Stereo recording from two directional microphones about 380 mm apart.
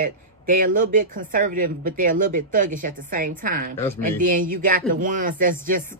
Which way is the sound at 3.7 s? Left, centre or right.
Centre.